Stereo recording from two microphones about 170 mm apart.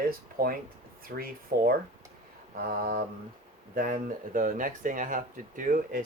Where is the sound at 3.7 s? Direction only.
55° right (ahead or behind).